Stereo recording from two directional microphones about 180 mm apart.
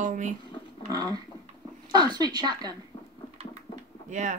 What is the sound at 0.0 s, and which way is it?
Speech, 45° right (ahead or behind).